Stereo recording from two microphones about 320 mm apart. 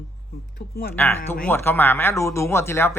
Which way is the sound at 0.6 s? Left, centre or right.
Left.